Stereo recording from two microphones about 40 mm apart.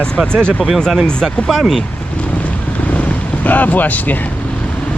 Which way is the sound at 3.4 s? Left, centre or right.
Left.